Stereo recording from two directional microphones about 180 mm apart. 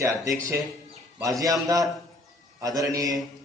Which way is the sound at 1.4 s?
20° right (ahead or behind).